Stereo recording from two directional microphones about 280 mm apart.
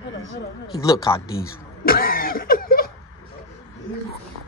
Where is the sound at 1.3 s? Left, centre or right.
Left.